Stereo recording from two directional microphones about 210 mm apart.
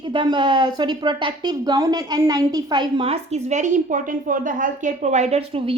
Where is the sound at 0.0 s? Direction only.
20° right (ahead or behind).